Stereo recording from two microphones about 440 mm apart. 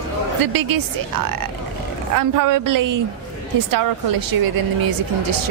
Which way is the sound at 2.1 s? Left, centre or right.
Right.